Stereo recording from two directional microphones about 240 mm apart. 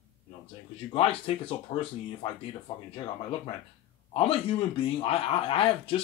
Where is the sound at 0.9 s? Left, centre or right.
Left.